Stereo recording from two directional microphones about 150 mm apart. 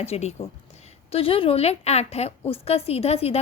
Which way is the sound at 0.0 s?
45° left (ahead or behind).